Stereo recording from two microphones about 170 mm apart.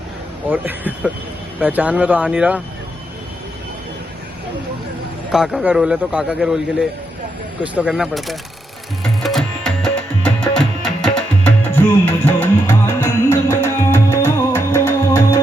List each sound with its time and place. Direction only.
0.5 s speech: 10° right (ahead or behind)
5.3 s speech: centre (ahead or behind)
9.2 s tabla: 5° left (ahead or behind)
13.3 s music: 15° left (ahead or behind)